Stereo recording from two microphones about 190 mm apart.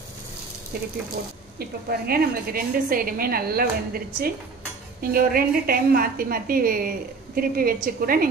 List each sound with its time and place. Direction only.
0.7 s a woman's voice: 50° right (ahead or behind)